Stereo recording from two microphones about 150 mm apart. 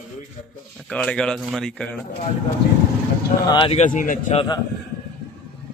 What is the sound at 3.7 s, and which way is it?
Speech, 55° left (ahead or behind).